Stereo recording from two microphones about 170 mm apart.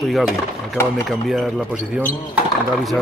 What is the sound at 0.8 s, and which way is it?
Speech, 15° left (ahead or behind).